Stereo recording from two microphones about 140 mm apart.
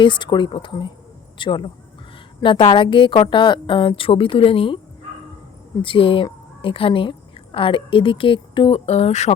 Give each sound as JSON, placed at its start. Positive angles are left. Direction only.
{"t": 0.0, "sound": "a woman's voice", "side_deg": 35}
{"t": 5.8, "sound": "a woman's voice", "side_deg": 40}
{"t": 8.9, "sound": "speech", "side_deg": 50}